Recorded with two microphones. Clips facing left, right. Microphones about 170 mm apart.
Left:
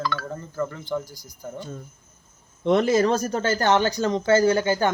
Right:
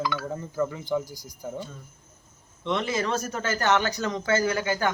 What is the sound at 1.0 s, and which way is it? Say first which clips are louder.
Speech: right 2 dB; 40° right (ahead or behind).